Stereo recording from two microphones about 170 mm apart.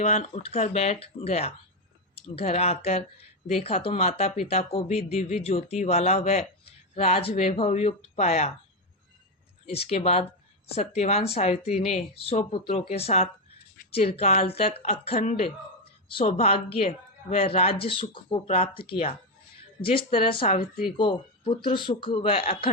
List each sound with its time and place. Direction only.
0.0 s speech: 45° left (ahead or behind)
9.7 s speech: 35° left (ahead or behind)